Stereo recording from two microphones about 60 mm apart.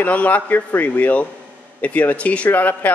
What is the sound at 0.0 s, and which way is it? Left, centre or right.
Speech, left.